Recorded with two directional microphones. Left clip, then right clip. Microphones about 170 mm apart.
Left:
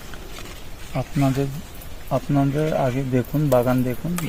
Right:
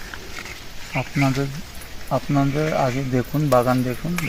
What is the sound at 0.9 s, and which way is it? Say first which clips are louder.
Speech: right 1 dB; 15° left (ahead or behind).